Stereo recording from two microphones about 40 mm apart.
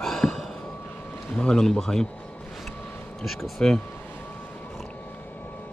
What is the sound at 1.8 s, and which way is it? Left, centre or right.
Speech, centre.